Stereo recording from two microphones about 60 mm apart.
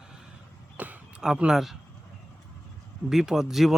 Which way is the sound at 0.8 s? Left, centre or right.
Right.